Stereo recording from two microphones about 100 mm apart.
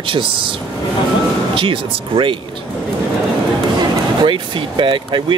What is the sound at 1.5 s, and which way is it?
Speech, 60° right (ahead or behind).